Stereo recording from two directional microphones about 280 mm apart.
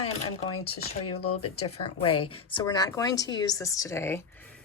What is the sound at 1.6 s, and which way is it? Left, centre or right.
A woman's voice, centre.